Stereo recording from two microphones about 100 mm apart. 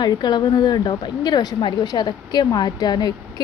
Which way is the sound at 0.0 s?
45° left (ahead or behind).